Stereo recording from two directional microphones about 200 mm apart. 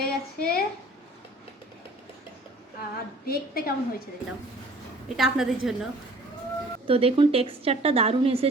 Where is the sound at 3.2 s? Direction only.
50° left (ahead or behind).